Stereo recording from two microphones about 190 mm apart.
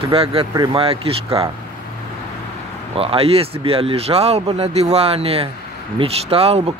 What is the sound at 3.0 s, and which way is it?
Speech, 30° right (ahead or behind).